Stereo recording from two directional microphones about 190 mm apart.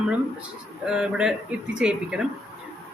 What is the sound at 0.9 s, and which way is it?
Speech, 5° right (ahead or behind).